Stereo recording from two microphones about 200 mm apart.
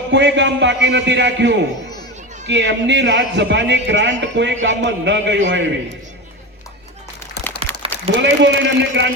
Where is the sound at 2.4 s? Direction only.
60° right (ahead or behind).